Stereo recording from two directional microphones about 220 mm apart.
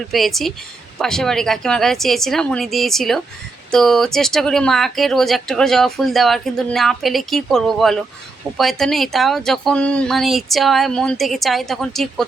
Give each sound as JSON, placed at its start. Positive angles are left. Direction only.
{"t": 0.1, "sound": "speech", "side_deg": 0}